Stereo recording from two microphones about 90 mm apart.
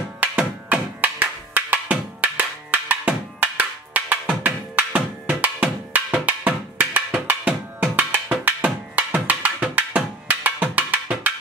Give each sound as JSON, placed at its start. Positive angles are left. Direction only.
{"t": 0.2, "sound": "music", "side_deg": -15}
{"t": 5.4, "sound": "percussion", "side_deg": -15}
{"t": 7.2, "sound": "music", "side_deg": -20}